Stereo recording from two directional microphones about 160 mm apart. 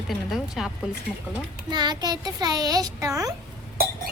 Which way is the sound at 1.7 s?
25° right (ahead or behind).